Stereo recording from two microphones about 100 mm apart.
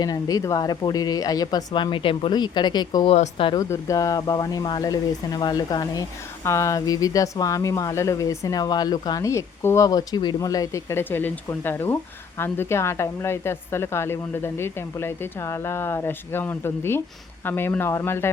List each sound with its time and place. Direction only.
0.0 s speech: 40° left (ahead or behind)
1.7 s speech: 55° left (ahead or behind)
3.1 s speech: 60° left (ahead or behind)
3.5 s a woman's voice: 35° left (ahead or behind)